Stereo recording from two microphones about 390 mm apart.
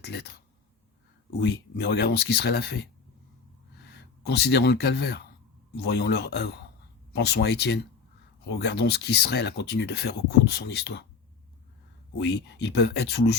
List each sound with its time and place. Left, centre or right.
0.0 s speech: left
1.4 s speech: left
4.3 s speech: left
12.2 s speech: left